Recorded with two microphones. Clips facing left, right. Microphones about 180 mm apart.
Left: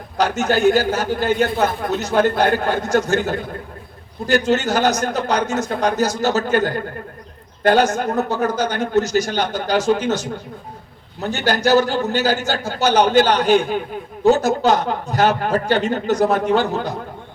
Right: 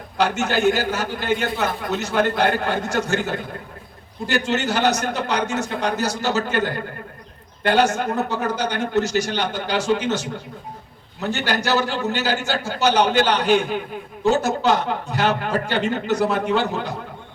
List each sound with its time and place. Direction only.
0.2 s a man's voice: 45° left (ahead or behind)
11.3 s a man's voice: 40° left (ahead or behind)